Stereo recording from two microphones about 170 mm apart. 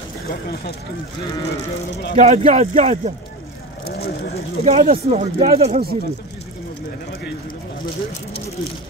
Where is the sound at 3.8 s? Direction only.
65° left (ahead or behind).